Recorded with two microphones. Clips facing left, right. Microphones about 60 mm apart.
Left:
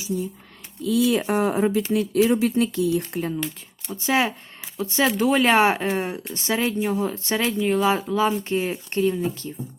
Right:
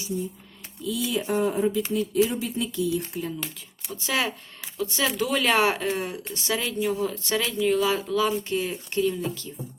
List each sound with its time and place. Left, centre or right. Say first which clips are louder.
0.8 s speech: left 7 dB; left
3.9 s speech: left 5 dB; left